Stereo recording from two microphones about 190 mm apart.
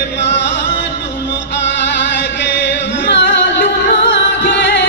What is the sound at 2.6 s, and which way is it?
Music, 65° left (ahead or behind).